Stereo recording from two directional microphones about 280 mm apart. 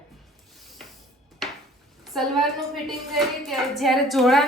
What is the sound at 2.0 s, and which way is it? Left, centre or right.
A woman's voice, centre.